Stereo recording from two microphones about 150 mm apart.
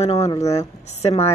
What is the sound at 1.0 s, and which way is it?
Speech, 45° left (ahead or behind).